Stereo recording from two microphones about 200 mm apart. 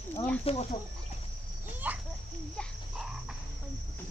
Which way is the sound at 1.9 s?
10° right (ahead or behind).